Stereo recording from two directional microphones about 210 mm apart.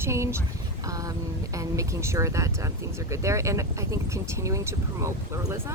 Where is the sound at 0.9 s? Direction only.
15° right (ahead or behind).